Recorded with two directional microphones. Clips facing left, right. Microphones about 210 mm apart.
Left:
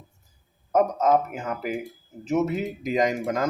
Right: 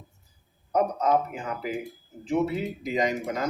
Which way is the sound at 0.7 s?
45° left (ahead or behind).